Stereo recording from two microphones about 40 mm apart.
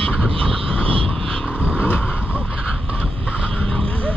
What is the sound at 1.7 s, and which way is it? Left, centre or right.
Vehicle, left.